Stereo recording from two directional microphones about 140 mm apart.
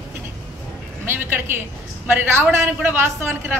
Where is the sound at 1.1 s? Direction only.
15° right (ahead or behind).